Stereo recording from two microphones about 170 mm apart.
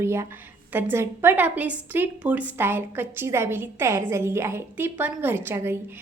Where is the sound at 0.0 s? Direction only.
15° right (ahead or behind).